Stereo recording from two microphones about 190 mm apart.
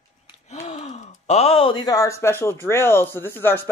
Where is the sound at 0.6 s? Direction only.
40° left (ahead or behind).